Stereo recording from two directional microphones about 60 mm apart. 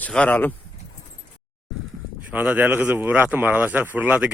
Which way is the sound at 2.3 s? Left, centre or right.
Right.